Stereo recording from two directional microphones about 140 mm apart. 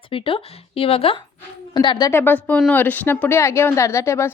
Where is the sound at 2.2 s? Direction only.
10° left (ahead or behind).